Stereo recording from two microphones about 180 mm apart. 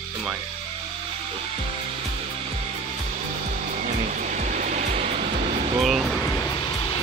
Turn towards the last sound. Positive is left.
turn(degrees=0)  # may be behind; listen again after turning